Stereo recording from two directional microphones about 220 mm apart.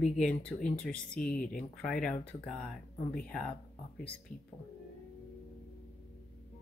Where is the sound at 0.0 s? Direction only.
35° left (ahead or behind).